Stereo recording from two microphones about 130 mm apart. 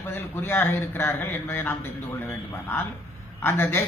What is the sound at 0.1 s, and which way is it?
A man's voice, 15° left (ahead or behind).